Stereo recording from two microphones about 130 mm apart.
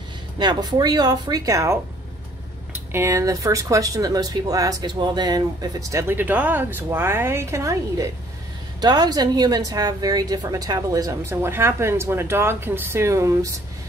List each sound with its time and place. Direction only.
0.4 s speech: 30° right (ahead or behind)
2.9 s speech: 20° right (ahead or behind)